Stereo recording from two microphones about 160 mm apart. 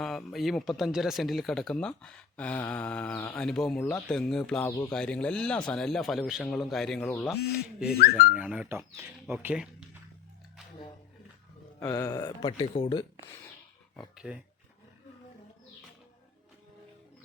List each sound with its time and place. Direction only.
0.0 s speech: centre (ahead or behind)
11.9 s speech: 20° left (ahead or behind)
14.2 s speech: 5° right (ahead or behind)